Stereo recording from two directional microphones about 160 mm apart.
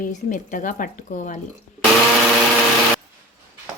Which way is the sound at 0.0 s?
50° left (ahead or behind).